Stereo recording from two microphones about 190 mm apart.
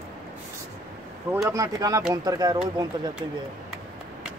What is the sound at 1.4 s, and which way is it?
A man's voice, 15° right (ahead or behind).